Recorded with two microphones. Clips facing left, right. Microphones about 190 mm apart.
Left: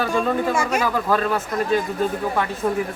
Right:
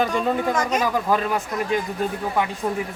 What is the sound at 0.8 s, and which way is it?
Speech, 15° right (ahead or behind).